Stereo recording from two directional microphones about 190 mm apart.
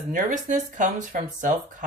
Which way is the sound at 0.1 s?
40° right (ahead or behind).